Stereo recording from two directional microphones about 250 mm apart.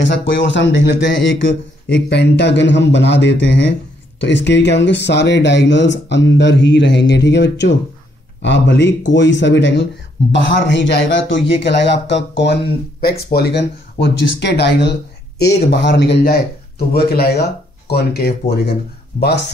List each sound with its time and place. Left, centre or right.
0.0 s a man's voice: left